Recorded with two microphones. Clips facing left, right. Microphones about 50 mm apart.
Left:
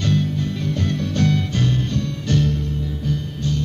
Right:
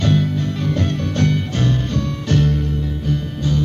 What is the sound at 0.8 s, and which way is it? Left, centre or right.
Music, right.